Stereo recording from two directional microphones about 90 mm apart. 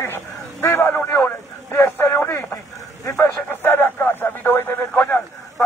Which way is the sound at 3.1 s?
25° left (ahead or behind).